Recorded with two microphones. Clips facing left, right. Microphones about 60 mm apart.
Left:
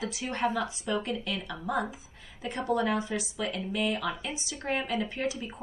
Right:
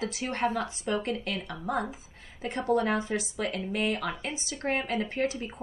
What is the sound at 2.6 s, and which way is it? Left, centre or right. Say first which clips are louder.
A woman's voice: right 2 dB; right.